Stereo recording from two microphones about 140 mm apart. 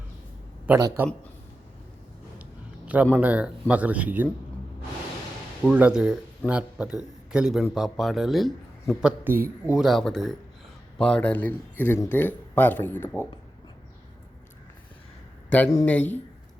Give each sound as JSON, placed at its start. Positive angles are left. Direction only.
{"t": 0.8, "sound": "speech", "side_deg": -15}
{"t": 2.8, "sound": "speech", "side_deg": -10}
{"t": 5.6, "sound": "speech", "side_deg": -5}
{"t": 9.0, "sound": "speech", "side_deg": -10}
{"t": 9.7, "sound": "speech", "side_deg": 0}
{"t": 15.4, "sound": "speech", "side_deg": 10}